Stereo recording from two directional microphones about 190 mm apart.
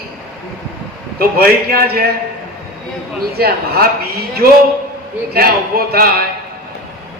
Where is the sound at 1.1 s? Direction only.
55° right (ahead or behind).